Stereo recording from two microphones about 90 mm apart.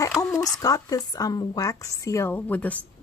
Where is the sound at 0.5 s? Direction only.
45° left (ahead or behind).